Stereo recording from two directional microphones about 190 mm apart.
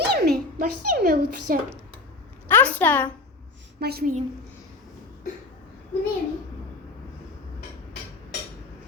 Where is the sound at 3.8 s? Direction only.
55° right (ahead or behind).